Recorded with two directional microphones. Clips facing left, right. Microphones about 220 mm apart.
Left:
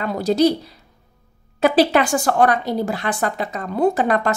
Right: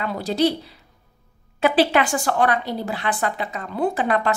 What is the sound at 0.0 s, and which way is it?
Speech, 45° left (ahead or behind).